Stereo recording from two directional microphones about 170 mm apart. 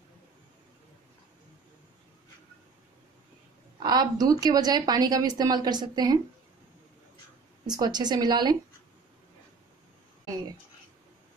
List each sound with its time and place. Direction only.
3.8 s a woman's voice: 25° right (ahead or behind)
7.6 s a woman's voice: 25° right (ahead or behind)